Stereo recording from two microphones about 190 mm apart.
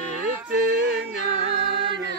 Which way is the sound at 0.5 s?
65° right (ahead or behind).